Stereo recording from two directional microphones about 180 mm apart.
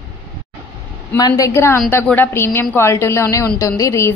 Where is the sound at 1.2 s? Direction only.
15° left (ahead or behind).